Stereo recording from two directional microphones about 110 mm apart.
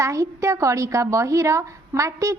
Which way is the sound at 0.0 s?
30° right (ahead or behind).